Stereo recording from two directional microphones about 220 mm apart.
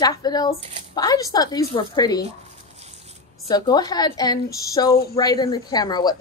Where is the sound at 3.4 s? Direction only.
15° left (ahead or behind).